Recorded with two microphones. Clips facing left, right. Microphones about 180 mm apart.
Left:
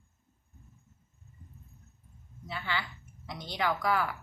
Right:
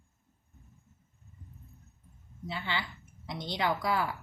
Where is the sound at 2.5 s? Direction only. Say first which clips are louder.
Even; 25° right (ahead or behind).